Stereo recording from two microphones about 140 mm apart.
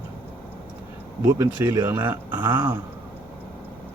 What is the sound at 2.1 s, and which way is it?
Speech, 15° right (ahead or behind).